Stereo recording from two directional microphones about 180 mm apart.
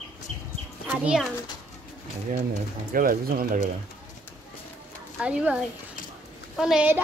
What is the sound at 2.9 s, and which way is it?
Speech, 50° right (ahead or behind).